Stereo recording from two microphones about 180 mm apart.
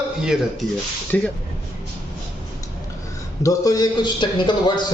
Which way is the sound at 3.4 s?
20° left (ahead or behind).